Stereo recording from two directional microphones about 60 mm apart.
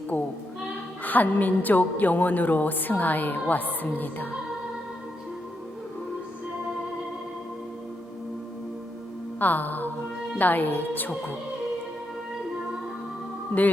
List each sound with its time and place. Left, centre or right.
0.1 s a woman's voice: left
9.4 s speech: left